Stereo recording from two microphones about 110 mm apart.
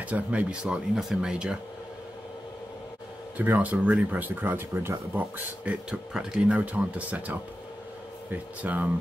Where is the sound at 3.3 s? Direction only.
15° right (ahead or behind).